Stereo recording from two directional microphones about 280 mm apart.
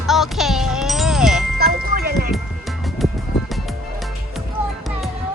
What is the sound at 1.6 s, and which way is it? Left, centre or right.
Wind chime, right.